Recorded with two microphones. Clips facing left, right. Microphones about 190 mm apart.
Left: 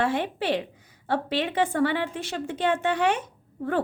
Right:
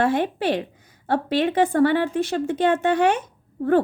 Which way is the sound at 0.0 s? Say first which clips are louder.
Right 5 dB; 45° right (ahead or behind).